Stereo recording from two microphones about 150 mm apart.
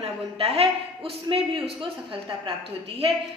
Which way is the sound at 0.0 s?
40° right (ahead or behind).